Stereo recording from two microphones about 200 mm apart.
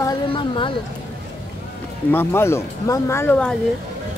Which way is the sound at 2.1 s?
10° left (ahead or behind).